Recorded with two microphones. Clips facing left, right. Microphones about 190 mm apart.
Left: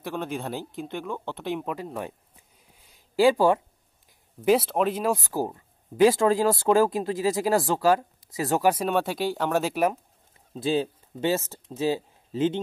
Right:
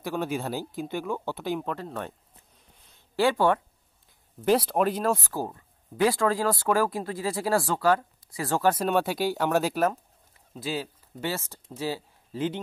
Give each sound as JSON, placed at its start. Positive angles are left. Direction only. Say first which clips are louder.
{"t": 0.0, "sound": "speech", "louder": "right 2 dB", "side_deg": -5}
{"t": 2.7, "sound": "a sound", "louder": "left 3 dB", "side_deg": 15}
{"t": 4.5, "sound": "speech", "louder": "left 1 dB", "side_deg": 0}
{"t": 5.1, "sound": "speech", "louder": "left 3 dB", "side_deg": 15}
{"t": 8.8, "sound": "speech", "louder": "even", "side_deg": 0}
{"t": 10.5, "sound": "speech", "louder": "left 7 dB", "side_deg": 25}